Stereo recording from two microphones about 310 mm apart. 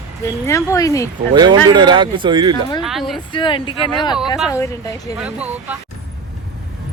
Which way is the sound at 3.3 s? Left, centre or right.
Centre.